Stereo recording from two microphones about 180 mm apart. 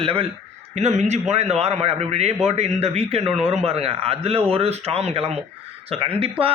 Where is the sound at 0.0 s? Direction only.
30° right (ahead or behind).